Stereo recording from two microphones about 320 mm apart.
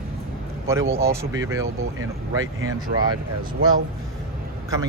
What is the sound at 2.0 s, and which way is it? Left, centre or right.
Speech, right.